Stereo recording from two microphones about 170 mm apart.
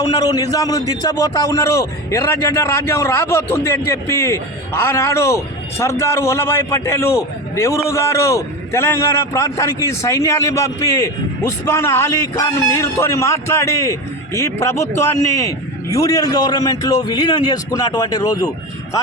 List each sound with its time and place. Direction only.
0.0 s a man's voice: 20° left (ahead or behind)